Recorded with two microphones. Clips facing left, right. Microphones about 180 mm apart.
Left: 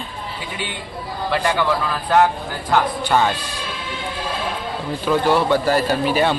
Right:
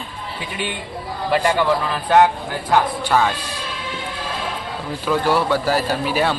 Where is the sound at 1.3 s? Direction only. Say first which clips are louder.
Right 2 dB; 10° right (ahead or behind).